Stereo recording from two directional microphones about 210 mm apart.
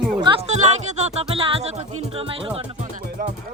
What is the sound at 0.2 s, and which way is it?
Music, 25° right (ahead or behind).